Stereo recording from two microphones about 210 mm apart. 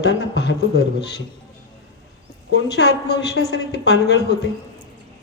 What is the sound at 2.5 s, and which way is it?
Speech, 55° left (ahead or behind).